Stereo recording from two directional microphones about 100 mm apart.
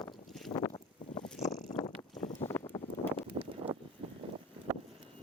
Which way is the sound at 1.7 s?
40° left (ahead or behind).